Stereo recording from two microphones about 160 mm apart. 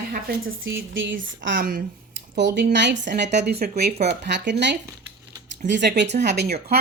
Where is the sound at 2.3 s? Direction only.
90° right.